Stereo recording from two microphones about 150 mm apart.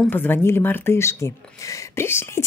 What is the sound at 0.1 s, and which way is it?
A woman's voice, 15° left (ahead or behind).